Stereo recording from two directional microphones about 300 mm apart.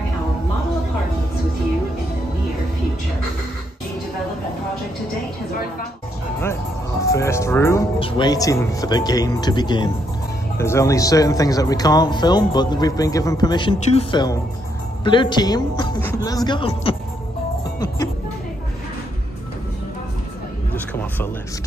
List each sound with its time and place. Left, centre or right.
7.1 s speech: centre